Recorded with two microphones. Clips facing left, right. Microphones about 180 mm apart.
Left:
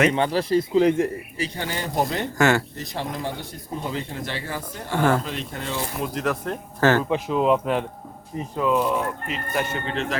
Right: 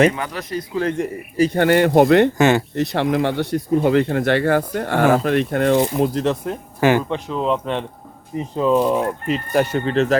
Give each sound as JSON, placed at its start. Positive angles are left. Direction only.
{"t": 0.1, "sound": "speech", "side_deg": 30}
{"t": 1.4, "sound": "speech", "side_deg": -55}
{"t": 2.4, "sound": "speech", "side_deg": -20}
{"t": 2.7, "sound": "speech", "side_deg": -70}
{"t": 6.0, "sound": "speech", "side_deg": -35}
{"t": 6.4, "sound": "speech", "side_deg": -10}
{"t": 7.1, "sound": "speech", "side_deg": 5}
{"t": 8.5, "sound": "speech", "side_deg": -30}